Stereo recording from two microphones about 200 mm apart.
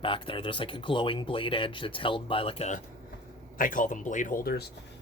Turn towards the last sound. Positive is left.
turn(degrees=50)  # may be behind; listen again after turning